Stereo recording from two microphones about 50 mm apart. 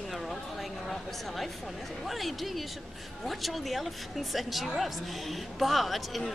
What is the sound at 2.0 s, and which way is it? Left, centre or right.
Speech, centre.